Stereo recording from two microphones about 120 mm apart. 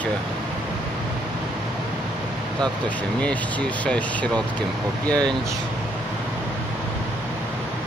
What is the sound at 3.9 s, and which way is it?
Speech, 10° left (ahead or behind).